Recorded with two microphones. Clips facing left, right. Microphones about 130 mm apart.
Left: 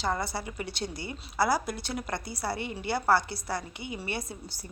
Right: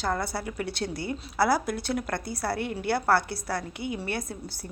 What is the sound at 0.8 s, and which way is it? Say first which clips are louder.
Speech: right 5 dB; 60° right (ahead or behind).